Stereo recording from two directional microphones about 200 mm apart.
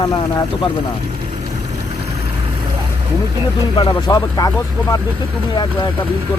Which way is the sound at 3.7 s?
20° left (ahead or behind).